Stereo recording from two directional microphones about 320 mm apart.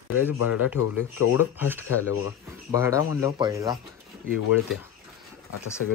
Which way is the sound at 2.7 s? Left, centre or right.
Centre.